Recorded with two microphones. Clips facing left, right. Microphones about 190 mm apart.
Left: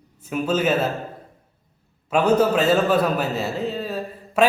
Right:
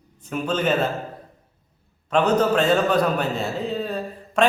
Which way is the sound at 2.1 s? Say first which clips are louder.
Left 1 dB; 10° left (ahead or behind).